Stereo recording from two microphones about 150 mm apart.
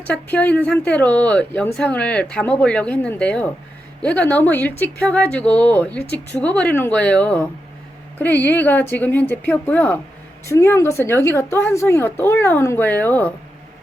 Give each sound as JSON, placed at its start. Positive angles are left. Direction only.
{"t": 0.0, "sound": "speech", "side_deg": 10}